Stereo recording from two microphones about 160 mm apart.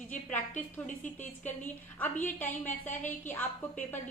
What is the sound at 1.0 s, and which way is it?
A woman's voice, 10° left (ahead or behind).